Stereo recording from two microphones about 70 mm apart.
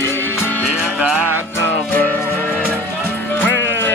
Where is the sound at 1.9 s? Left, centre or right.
Left.